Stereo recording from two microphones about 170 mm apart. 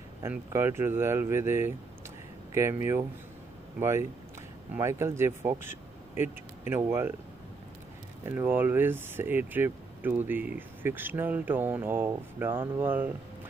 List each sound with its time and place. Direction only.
0.2 s speech: 15° right (ahead or behind)
8.3 s speech: 10° right (ahead or behind)